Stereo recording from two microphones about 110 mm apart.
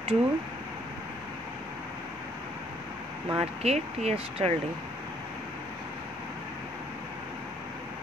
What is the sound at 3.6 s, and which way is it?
Speech, 80° right.